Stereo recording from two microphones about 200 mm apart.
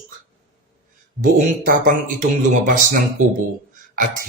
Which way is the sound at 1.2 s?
45° right (ahead or behind).